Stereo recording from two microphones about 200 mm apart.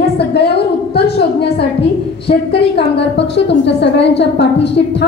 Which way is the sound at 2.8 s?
60° left (ahead or behind).